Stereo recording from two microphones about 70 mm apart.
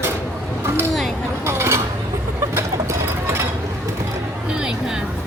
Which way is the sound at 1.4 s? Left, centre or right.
Right.